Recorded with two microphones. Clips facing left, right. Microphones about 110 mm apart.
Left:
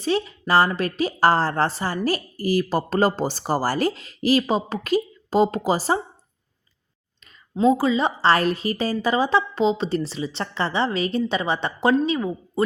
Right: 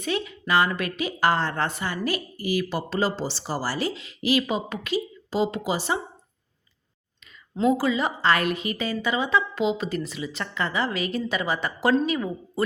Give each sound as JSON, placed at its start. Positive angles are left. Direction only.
{"t": 0.0, "sound": "a woman's voice", "side_deg": 30}
{"t": 7.5, "sound": "a woman's voice", "side_deg": 25}